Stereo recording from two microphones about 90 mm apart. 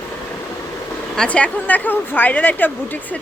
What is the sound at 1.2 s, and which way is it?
Speech, 10° left (ahead or behind).